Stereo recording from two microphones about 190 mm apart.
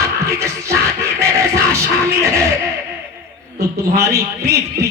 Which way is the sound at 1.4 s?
15° right (ahead or behind).